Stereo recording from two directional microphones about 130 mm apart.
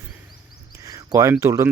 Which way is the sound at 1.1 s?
25° right (ahead or behind).